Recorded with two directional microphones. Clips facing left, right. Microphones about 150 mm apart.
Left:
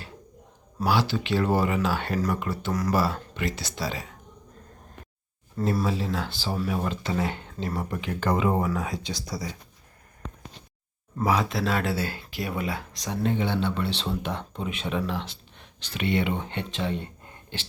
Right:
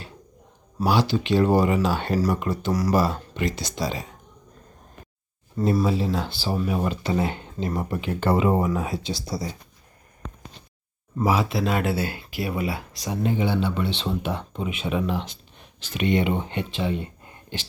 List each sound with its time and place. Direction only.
0.9 s speech: 15° right (ahead or behind)
5.8 s speech: 20° right (ahead or behind)
8.6 s speech: 20° right (ahead or behind)
11.2 s speech: 10° right (ahead or behind)
17.5 s speech: 15° right (ahead or behind)